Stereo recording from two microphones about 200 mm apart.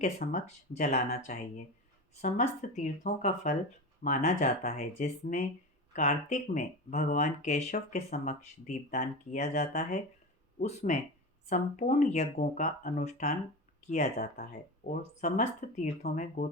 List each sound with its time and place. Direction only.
0.2 s speech: 35° left (ahead or behind)
2.6 s speech: 40° left (ahead or behind)